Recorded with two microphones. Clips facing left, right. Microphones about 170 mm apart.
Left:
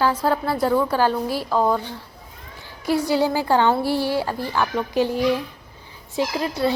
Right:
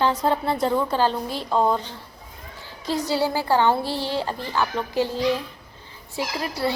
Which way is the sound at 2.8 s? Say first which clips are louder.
Left 4 dB; 10° left (ahead or behind).